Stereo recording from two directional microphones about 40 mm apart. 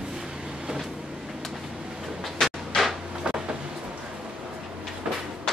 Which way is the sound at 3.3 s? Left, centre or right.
Right.